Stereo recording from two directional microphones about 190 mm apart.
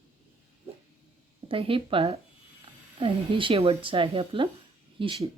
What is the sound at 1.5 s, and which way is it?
Speech, 30° right (ahead or behind).